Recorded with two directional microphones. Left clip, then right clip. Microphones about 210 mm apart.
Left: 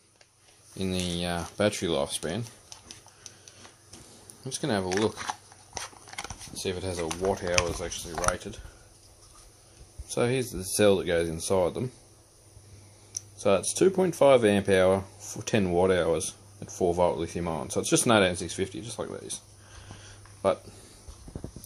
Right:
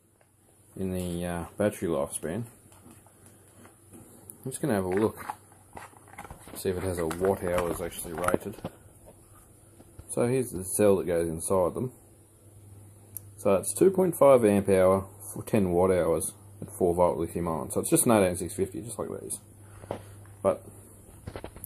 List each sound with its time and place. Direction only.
0.7 s speech: 30° left (ahead or behind)
4.5 s speech: 15° left (ahead or behind)
4.8 s speech: 40° left (ahead or behind)
5.8 s horse: 40° left (ahead or behind)
6.5 s speech: 10° left (ahead or behind)
10.1 s speech: 25° left (ahead or behind)
13.7 s speech: 25° left (ahead or behind)